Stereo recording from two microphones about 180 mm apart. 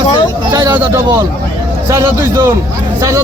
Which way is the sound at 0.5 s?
20° right (ahead or behind).